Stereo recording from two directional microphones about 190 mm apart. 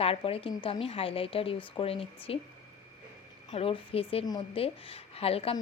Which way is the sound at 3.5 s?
30° left (ahead or behind).